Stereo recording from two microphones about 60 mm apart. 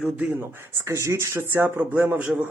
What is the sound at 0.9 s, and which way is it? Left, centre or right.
Speech, right.